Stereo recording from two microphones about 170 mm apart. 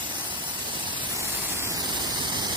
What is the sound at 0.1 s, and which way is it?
Spray, 25° right (ahead or behind).